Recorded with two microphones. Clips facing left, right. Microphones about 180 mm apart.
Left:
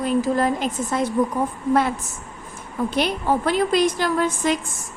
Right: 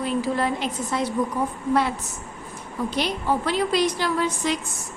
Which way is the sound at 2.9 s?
50° left (ahead or behind).